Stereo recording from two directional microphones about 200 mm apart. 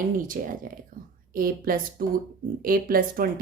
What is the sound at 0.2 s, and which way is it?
Speech, 45° right (ahead or behind).